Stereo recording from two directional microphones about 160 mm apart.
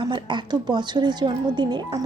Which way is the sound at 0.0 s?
30° right (ahead or behind).